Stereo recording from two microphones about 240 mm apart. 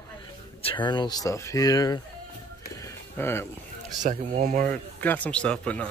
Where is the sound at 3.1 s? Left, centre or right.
Centre.